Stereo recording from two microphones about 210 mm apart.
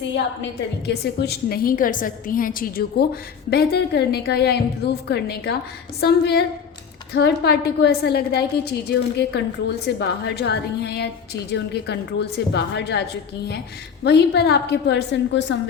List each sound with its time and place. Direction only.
0.9 s a woman's voice: 50° left (ahead or behind)